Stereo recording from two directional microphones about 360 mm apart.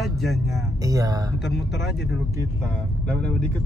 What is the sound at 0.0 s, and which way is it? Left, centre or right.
Speech, centre.